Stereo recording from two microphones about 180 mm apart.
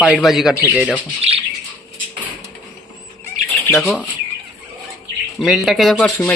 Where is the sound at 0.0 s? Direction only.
Centre (ahead or behind).